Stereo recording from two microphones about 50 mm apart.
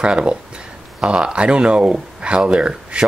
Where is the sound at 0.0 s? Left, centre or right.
Right.